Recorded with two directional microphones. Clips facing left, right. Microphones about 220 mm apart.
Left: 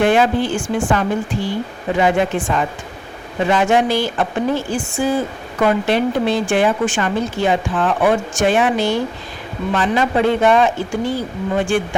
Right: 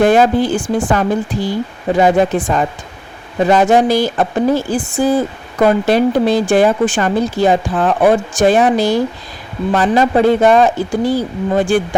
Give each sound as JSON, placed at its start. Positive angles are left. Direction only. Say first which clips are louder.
{"t": 0.0, "sound": "speech", "louder": "right 4 dB", "side_deg": -40}